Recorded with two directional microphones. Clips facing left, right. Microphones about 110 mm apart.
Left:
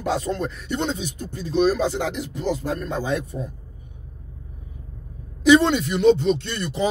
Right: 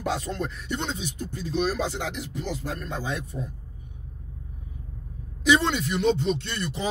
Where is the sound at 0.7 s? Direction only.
55° left (ahead or behind).